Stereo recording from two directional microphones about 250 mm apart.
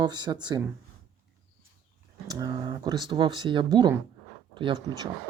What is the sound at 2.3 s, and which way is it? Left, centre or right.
Speech, centre.